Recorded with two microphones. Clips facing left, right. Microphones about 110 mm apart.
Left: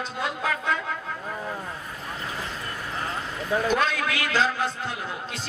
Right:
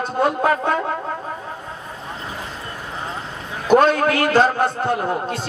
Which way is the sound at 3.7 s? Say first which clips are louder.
Right 10 dB; 50° right (ahead or behind).